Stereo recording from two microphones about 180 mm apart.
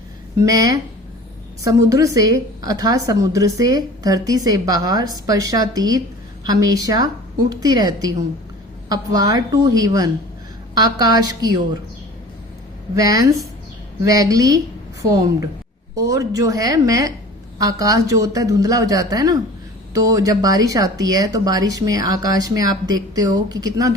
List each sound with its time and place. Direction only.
0.3 s a woman's voice: 20° right (ahead or behind)
13.0 s a woman's voice: 20° right (ahead or behind)